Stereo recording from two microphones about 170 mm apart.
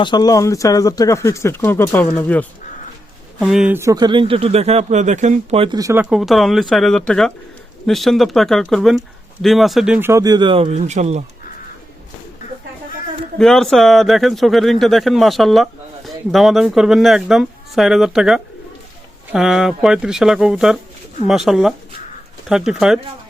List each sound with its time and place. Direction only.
0.0 s speech: 25° left (ahead or behind); by 2.5 s 10° left (ahead or behind)
3.4 s speech: 5° right (ahead or behind)
3.8 s speech: 20° right (ahead or behind); by 5.7 s 35° right (ahead or behind)
5.7 s speech: 15° right (ahead or behind)
6.1 s speech: centre (ahead or behind); by 11.2 s 40° right (ahead or behind)
13.4 s speech: centre (ahead or behind)